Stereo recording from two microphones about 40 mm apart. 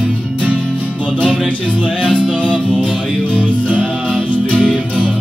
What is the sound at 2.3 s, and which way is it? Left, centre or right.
Music, left.